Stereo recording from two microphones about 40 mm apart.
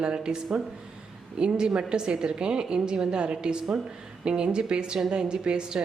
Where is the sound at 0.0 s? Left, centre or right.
Right.